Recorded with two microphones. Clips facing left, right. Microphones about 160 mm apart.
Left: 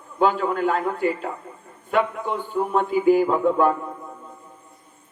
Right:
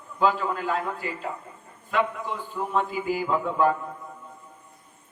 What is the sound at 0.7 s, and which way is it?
Speech, 60° left (ahead or behind).